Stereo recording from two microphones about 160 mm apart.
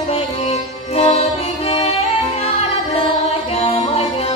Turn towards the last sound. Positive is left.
turn(degrees=40)  # may be behind; listen again after turning